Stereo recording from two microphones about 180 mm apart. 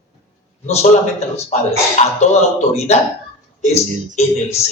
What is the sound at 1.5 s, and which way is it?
A man's voice, 40° left (ahead or behind).